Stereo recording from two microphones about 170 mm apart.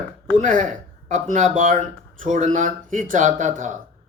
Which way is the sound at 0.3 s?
50° right (ahead or behind).